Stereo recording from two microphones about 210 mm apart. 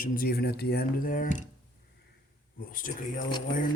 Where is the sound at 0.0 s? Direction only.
45° left (ahead or behind).